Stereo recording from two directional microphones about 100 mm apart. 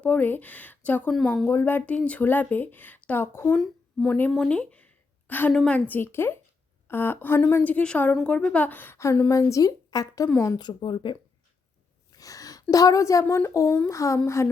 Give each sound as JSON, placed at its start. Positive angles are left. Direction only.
{"t": 0.0, "sound": "a woman's voice", "side_deg": 20}
{"t": 1.1, "sound": "speech", "side_deg": 5}
{"t": 1.5, "sound": "a woman's voice", "side_deg": 20}
{"t": 3.5, "sound": "a woman's voice", "side_deg": 10}
{"t": 10.6, "sound": "speech", "side_deg": 50}
{"t": 12.1, "sound": "a sound", "side_deg": 35}
{"t": 12.7, "sound": "a woman's voice", "side_deg": 35}
{"t": 13.7, "sound": "a woman's voice", "side_deg": 20}
{"t": 13.9, "sound": "a woman's voice", "side_deg": 30}